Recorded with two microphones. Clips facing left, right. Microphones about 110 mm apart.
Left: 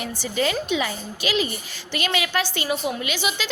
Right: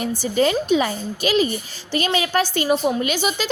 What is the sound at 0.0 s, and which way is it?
A woman's voice, 40° right (ahead or behind).